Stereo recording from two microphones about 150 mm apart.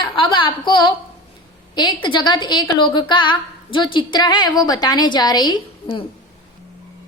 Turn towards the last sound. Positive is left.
turn(degrees=30)  # may be behind; listen again after turning